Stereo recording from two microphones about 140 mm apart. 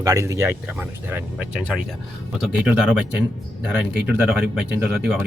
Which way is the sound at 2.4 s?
5° right (ahead or behind).